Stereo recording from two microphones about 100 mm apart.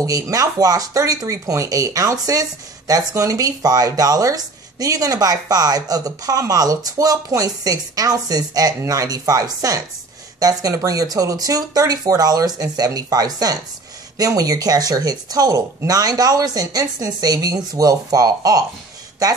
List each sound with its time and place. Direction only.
0.0 s speech: 35° right (ahead or behind)